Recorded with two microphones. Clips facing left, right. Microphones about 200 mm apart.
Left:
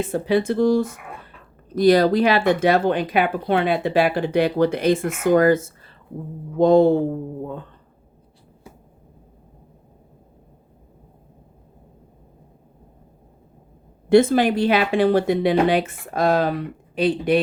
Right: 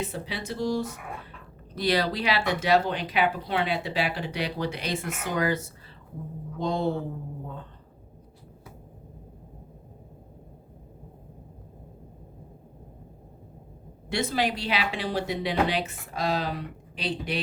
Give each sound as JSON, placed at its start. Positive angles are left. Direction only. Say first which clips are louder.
{"t": 0.0, "sound": "speech", "louder": "left 13 dB", "side_deg": 50}
{"t": 14.1, "sound": "speech", "louder": "left 12 dB", "side_deg": 50}